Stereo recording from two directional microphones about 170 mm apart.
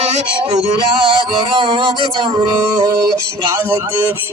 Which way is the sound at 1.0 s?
30° right (ahead or behind).